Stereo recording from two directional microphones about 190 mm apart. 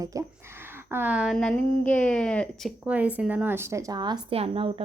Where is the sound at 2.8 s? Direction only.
5° right (ahead or behind).